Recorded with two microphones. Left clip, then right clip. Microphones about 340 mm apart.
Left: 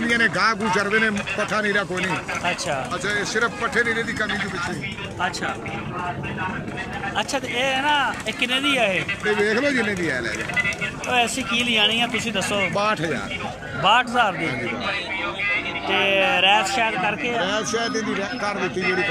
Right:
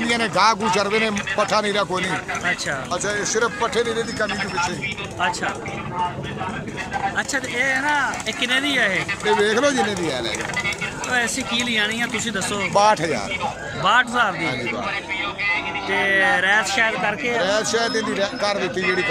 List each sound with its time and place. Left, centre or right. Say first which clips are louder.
0.0 s a man's voice: right 1 dB; centre
3.1 s a man's voice: right 1 dB; centre
7.2 s speech: left 3 dB; centre
8.9 s a man's voice: right 2 dB; centre
11.6 s speech: left 4 dB; centre
12.7 s a man's voice: right 5 dB; centre
13.8 s speech: even; centre
15.4 s music: right 1 dB; centre
16.1 s speech: even; centre
17.4 s a man's voice: right 3 dB; centre